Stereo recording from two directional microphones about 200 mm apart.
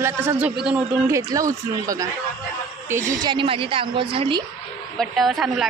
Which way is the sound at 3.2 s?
25° right (ahead or behind).